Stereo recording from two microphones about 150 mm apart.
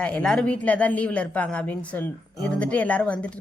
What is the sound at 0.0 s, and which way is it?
Speech, 5° left (ahead or behind).